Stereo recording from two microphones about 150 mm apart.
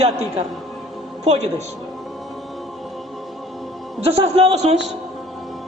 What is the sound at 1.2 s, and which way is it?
Speech, 45° right (ahead or behind).